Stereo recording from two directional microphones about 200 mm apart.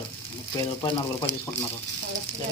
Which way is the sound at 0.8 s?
25° left (ahead or behind).